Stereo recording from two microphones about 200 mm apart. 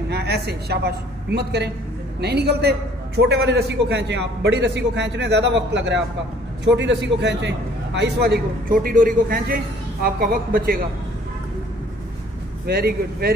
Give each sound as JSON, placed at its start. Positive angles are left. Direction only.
{"t": 0.1, "sound": "a woman's voice", "side_deg": -55}
{"t": 12.6, "sound": "speech", "side_deg": -50}